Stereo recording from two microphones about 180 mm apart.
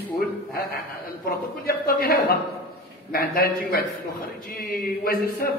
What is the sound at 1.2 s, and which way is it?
A man's voice, 55° left (ahead or behind).